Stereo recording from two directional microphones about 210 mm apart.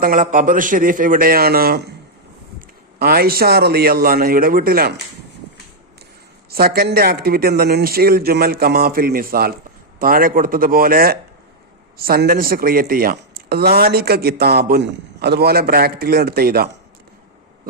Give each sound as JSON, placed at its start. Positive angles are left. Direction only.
{"t": 0.0, "sound": "a man's voice", "side_deg": -40}
{"t": 6.5, "sound": "speech", "side_deg": -45}